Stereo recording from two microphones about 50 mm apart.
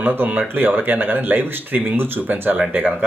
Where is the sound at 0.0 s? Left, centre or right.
Right.